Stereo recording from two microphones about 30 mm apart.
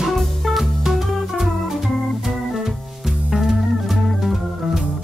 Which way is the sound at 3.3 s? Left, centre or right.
Centre.